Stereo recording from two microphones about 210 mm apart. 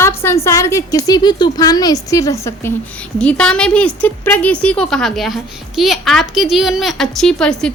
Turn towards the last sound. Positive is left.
turn(degrees=5)  # may be behind; listen again after turning